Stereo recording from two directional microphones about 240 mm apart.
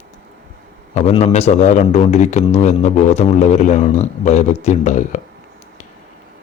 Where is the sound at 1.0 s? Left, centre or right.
Left.